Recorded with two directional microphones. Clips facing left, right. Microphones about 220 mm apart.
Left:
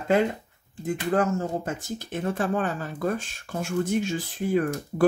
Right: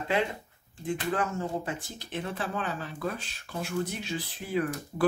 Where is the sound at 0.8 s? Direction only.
40° left (ahead or behind).